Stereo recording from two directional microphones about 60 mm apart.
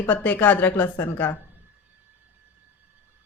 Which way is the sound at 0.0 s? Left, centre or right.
Left.